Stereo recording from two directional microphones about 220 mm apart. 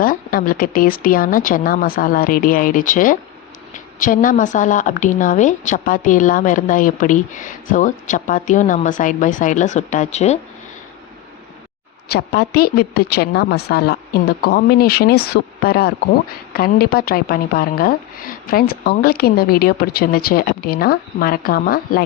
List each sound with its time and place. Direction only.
0.0 s speech: 40° left (ahead or behind)
12.0 s speech: 45° left (ahead or behind)